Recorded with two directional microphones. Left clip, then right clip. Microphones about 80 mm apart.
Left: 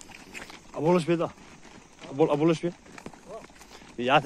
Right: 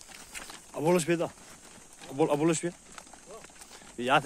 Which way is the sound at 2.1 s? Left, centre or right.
Right.